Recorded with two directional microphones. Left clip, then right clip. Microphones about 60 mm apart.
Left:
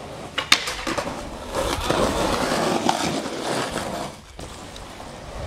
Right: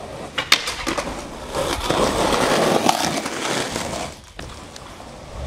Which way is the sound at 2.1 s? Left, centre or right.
Right.